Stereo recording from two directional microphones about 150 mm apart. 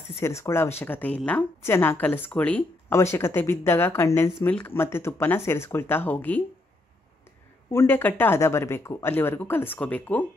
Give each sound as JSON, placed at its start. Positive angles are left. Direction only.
{"t": 0.2, "sound": "speech", "side_deg": 20}
{"t": 7.7, "sound": "speech", "side_deg": 15}